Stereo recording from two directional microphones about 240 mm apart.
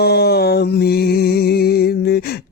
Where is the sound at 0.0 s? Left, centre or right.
Left.